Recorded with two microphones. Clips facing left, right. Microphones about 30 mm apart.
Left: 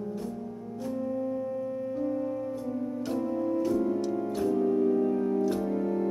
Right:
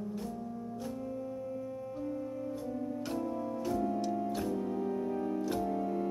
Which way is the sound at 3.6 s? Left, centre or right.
Centre.